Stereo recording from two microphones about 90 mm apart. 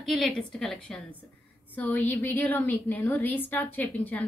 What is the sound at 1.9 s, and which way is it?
A woman's voice, 20° left (ahead or behind).